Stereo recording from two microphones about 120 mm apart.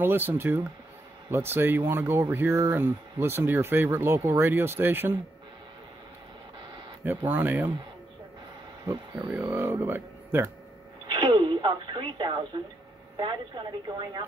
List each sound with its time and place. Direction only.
0.0 s speech: 20° right (ahead or behind)
7.2 s speech: 15° right (ahead or behind)
8.8 s speech: 20° right (ahead or behind)
11.1 s radio: 40° right (ahead or behind)
13.2 s a woman's voice: 40° right (ahead or behind)